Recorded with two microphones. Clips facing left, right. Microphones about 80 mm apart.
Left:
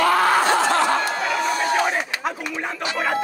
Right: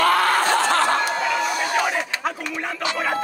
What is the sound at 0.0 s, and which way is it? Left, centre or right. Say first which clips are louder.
Snicker: left 1 dB; right.